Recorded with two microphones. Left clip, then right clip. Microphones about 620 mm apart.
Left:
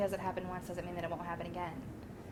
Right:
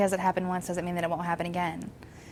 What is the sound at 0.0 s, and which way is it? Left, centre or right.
A woman's voice, right.